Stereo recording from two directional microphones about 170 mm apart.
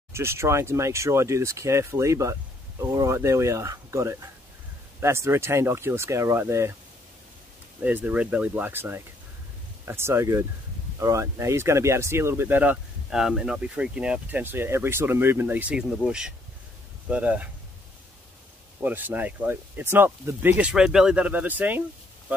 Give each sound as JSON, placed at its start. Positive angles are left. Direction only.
{"t": 0.1, "sound": "speech", "side_deg": -15}
{"t": 7.8, "sound": "speech", "side_deg": -10}
{"t": 18.8, "sound": "speech", "side_deg": -10}